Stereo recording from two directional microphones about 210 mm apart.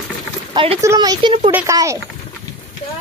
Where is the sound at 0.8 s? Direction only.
15° right (ahead or behind).